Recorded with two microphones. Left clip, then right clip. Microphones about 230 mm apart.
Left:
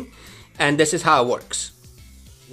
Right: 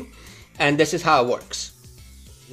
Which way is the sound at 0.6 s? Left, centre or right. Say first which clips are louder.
Left 1 dB; centre.